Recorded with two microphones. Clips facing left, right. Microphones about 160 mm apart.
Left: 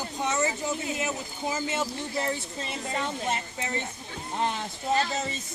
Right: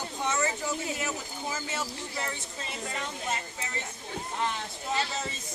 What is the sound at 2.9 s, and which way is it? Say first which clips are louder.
Speech: left 6 dB; 35° left (ahead or behind).